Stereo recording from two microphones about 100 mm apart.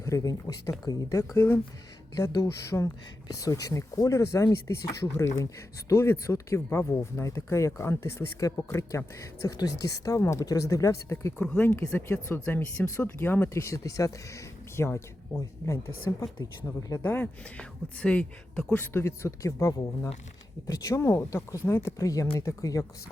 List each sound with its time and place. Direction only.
0.0 s speech: 35° left (ahead or behind)
2.1 s speech: 40° left (ahead or behind)
11.3 s speech: 15° left (ahead or behind); by 17.0 s 35° left (ahead or behind)
17.0 s speech: 20° left (ahead or behind); by 22.9 s 35° left (ahead or behind)